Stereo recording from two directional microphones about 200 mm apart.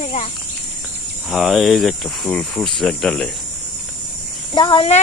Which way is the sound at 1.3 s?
Centre (ahead or behind).